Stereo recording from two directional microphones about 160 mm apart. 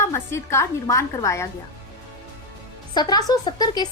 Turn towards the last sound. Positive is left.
turn(degrees=25)  # may be behind; listen again after turning